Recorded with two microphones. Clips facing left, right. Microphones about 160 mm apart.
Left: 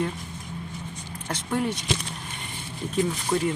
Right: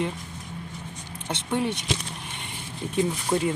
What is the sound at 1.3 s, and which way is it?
Speech, 20° right (ahead or behind).